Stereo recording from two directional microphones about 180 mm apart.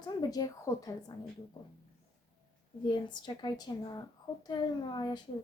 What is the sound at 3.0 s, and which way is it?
A woman's voice, 25° left (ahead or behind).